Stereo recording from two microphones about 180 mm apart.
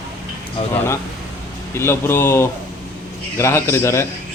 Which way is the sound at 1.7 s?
15° left (ahead or behind).